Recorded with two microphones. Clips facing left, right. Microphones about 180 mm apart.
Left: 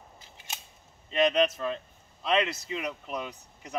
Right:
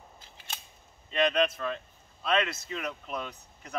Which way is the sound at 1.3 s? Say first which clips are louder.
Left 2 dB; 20° left (ahead or behind).